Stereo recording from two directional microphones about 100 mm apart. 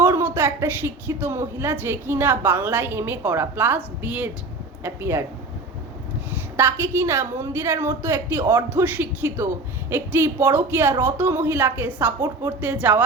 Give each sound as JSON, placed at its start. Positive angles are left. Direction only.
{"t": 0.0, "sound": "a woman's voice", "side_deg": -25}
{"t": 6.6, "sound": "a woman's voice", "side_deg": -25}